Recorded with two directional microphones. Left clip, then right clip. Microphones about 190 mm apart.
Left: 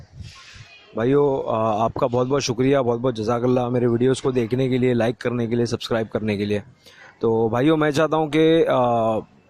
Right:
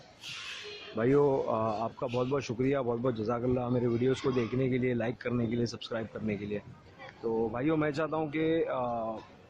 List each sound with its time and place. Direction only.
0.9 s a man's voice: 45° left (ahead or behind)